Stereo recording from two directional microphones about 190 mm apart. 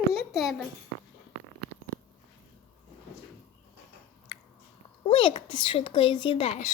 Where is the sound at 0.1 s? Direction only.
Centre (ahead or behind).